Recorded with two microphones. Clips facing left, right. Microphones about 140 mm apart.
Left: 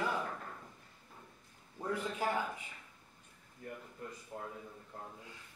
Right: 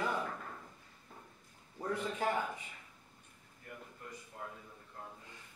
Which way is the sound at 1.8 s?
5° left (ahead or behind).